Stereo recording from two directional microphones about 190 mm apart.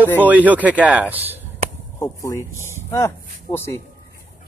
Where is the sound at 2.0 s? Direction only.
15° left (ahead or behind).